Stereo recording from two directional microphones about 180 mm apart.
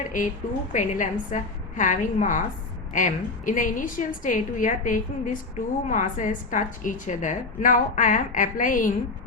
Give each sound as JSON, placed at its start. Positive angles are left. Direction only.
{"t": 0.0, "sound": "a woman's voice", "side_deg": 45}